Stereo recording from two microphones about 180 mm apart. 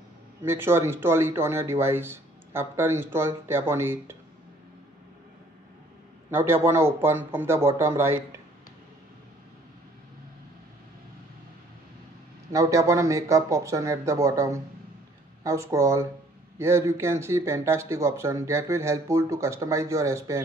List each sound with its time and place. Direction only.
0.4 s speech: 15° right (ahead or behind)
6.3 s speech: 15° right (ahead or behind)
12.5 s speech: 15° right (ahead or behind)